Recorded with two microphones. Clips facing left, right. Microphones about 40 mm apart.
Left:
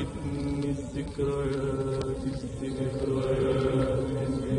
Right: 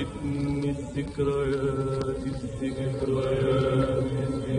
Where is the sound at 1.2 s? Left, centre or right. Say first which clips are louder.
Right 3 dB; right.